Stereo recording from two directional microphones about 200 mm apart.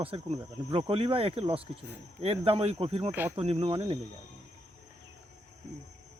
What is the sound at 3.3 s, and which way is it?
Speech, 25° right (ahead or behind).